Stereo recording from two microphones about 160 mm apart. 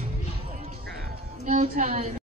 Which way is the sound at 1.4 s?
50° right (ahead or behind).